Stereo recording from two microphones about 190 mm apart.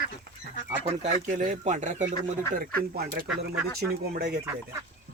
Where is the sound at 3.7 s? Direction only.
60° right (ahead or behind).